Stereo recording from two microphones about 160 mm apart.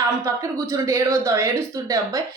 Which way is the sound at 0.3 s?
20° right (ahead or behind).